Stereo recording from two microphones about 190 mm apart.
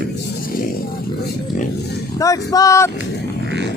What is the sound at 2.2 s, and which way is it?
Speech, 20° left (ahead or behind).